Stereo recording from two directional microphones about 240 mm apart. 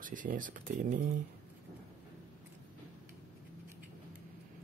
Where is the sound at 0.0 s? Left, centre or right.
Right.